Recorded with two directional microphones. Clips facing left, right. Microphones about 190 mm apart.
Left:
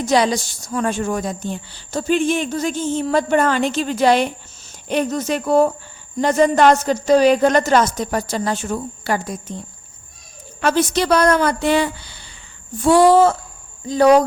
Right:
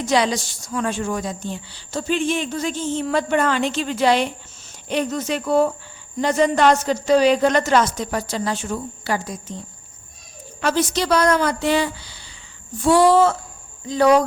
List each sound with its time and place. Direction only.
0.0 s a woman's voice: 40° left (ahead or behind)
10.6 s a woman's voice: 55° left (ahead or behind); by 14.3 s 40° left (ahead or behind)